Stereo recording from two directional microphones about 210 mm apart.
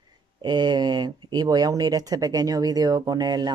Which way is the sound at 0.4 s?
20° right (ahead or behind).